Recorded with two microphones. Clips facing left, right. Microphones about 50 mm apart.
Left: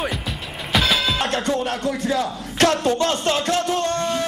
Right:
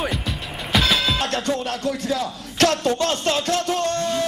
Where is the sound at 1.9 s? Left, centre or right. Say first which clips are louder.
Even; left.